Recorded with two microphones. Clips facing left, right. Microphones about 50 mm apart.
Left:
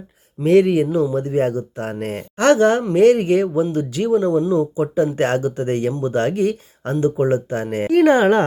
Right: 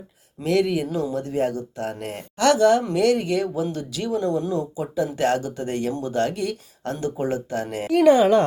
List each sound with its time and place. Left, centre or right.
0.4 s speech: left